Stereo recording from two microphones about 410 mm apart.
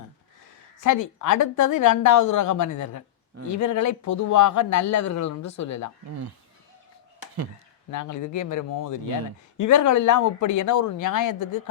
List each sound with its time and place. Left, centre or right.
0.8 s a woman's voice: left
7.9 s a woman's voice: left